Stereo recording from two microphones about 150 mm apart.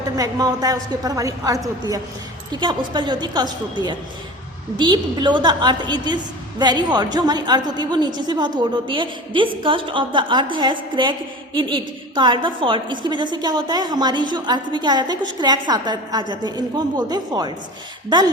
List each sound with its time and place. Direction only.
0.2 s a woman's voice: 25° right (ahead or behind)